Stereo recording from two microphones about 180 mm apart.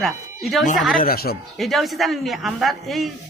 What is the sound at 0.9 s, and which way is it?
Speech, 55° left (ahead or behind).